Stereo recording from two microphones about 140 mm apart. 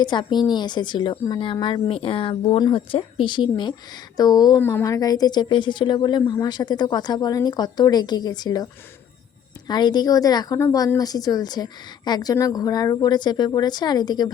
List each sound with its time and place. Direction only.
0.0 s a woman's voice: 35° left (ahead or behind)